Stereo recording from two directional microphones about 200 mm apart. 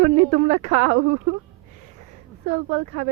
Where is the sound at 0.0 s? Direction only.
35° right (ahead or behind).